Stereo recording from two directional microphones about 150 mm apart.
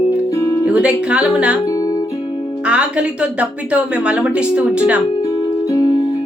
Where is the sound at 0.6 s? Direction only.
5° right (ahead or behind).